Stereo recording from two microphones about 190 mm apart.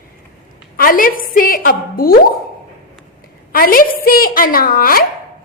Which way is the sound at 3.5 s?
50° left (ahead or behind).